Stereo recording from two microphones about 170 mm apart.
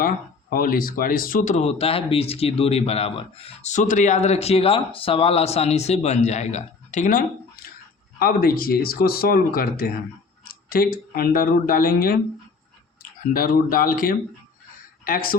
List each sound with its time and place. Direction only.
0.5 s speech: 55° left (ahead or behind)